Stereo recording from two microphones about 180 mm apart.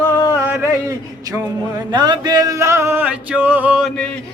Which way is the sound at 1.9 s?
25° right (ahead or behind).